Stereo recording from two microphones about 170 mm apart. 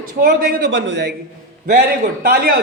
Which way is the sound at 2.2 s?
65° right (ahead or behind).